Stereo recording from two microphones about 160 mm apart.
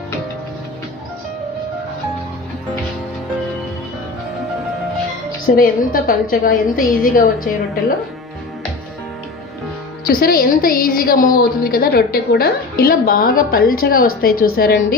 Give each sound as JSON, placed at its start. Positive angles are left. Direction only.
{"t": 5.5, "sound": "a woman's voice", "side_deg": 60}
{"t": 10.1, "sound": "a woman's voice", "side_deg": 65}